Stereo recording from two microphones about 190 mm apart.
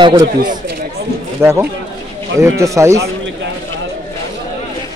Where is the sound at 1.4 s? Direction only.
10° right (ahead or behind).